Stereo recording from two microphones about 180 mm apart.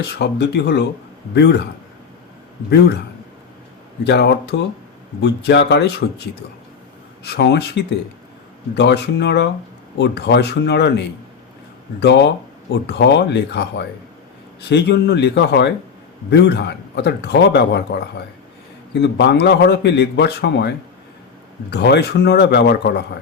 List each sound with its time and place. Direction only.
0.0 s a man's voice: 65° left (ahead or behind)
2.6 s speech: 65° left (ahead or behind)
4.0 s a man's voice: 70° left (ahead or behind)
7.3 s a man's voice: 70° left (ahead or behind)